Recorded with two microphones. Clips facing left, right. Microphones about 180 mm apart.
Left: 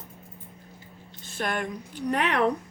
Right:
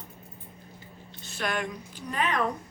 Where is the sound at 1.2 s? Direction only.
50° left (ahead or behind); by 2.5 s 70° left (ahead or behind).